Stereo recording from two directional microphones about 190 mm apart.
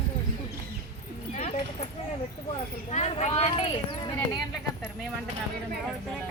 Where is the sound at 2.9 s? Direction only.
35° left (ahead or behind).